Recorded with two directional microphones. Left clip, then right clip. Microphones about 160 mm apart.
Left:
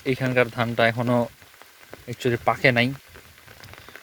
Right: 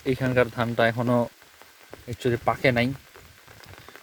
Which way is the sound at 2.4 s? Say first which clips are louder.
Left 3 dB; 10° right (ahead or behind).